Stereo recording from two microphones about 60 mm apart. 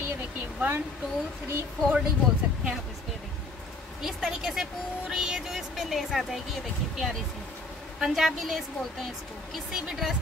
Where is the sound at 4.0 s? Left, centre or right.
Centre.